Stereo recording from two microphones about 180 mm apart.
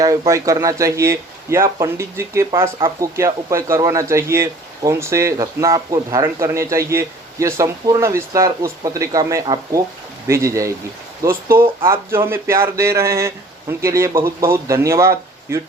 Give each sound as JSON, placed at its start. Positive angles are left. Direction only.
{"t": 0.0, "sound": "speech", "side_deg": -20}